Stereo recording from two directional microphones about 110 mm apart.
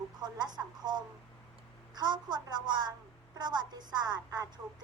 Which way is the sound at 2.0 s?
40° right (ahead or behind).